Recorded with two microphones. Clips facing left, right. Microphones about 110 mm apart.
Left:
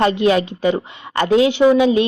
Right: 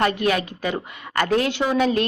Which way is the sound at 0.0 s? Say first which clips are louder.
Left 6 dB; 25° left (ahead or behind).